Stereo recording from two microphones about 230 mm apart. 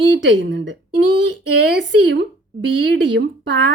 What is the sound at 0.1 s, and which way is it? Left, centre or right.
Speech, right.